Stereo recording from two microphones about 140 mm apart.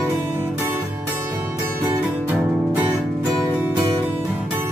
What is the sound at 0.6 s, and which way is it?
Music, 15° right (ahead or behind).